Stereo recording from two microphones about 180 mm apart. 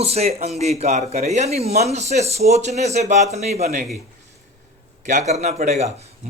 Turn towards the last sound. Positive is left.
turn(degrees=-40)  # may be behind; listen again after turning